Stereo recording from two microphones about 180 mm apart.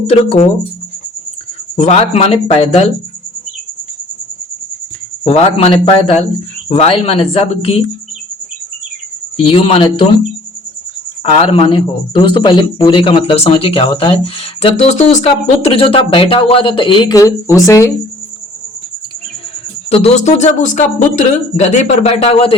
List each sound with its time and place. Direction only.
0.1 s speech: 30° left (ahead or behind)
1.7 s a man's voice: 35° left (ahead or behind)
5.2 s a man's voice: 35° left (ahead or behind)
9.4 s a man's voice: 30° left (ahead or behind)
11.2 s speech: 30° left (ahead or behind); by 17.9 s 15° left (ahead or behind)
19.9 s a man's voice: 35° left (ahead or behind)